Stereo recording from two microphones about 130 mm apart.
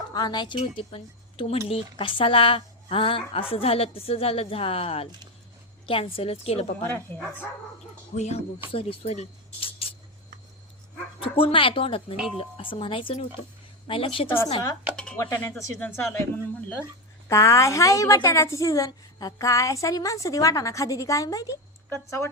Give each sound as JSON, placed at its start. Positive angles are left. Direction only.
{"t": 0.1, "sound": "speech", "side_deg": 30}
{"t": 0.6, "sound": "speech", "side_deg": 50}
{"t": 6.8, "sound": "speech", "side_deg": 10}
{"t": 8.1, "sound": "speech", "side_deg": 60}
{"t": 8.7, "sound": "speech", "side_deg": 45}
{"t": 11.2, "sound": "speech", "side_deg": 45}
{"t": 14.9, "sound": "a sound", "side_deg": 10}
{"t": 15.2, "sound": "speech", "side_deg": 15}
{"t": 17.2, "sound": "a woman's voice", "side_deg": 25}